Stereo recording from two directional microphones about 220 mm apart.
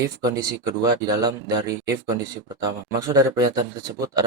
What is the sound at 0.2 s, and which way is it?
Speech, 15° right (ahead or behind).